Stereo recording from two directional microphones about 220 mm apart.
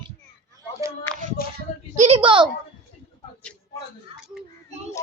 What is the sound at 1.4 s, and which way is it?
Speech, 40° left (ahead or behind).